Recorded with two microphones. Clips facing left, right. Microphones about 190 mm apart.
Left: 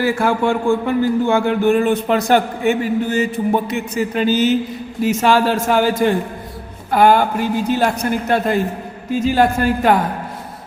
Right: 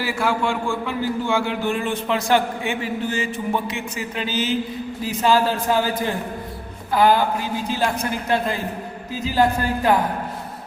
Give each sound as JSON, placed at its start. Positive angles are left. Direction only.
{"t": 0.0, "sound": "a man's voice", "side_deg": 50}
{"t": 5.0, "sound": "a man's voice", "side_deg": 75}
{"t": 6.9, "sound": "speech", "side_deg": 55}
{"t": 9.1, "sound": "a man's voice", "side_deg": 75}